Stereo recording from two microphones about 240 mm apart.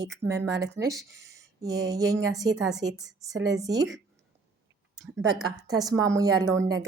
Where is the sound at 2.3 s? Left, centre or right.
Centre.